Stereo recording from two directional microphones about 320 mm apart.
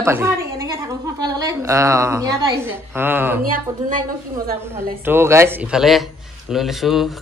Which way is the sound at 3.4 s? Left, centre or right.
Right.